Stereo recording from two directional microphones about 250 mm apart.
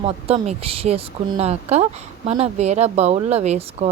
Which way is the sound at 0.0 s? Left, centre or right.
Right.